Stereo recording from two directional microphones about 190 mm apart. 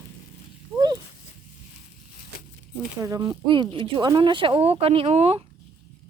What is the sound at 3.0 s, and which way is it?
Speech, 20° right (ahead or behind).